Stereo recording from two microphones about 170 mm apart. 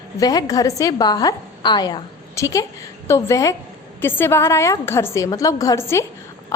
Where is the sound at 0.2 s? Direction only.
20° left (ahead or behind).